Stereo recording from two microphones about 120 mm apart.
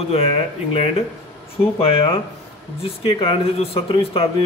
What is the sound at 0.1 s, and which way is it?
Speech, 55° left (ahead or behind).